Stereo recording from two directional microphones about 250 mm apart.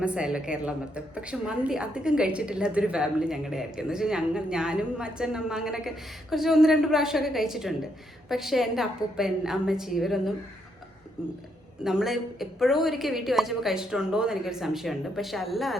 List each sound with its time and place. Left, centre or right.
0.0 s a woman's voice: centre